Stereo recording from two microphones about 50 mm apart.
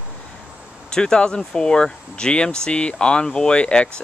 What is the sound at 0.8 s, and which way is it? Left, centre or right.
Speech, centre.